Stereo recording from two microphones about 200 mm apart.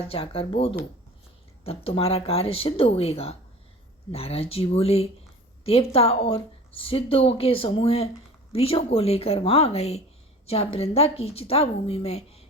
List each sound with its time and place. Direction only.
0.0 s a woman's voice: 30° left (ahead or behind)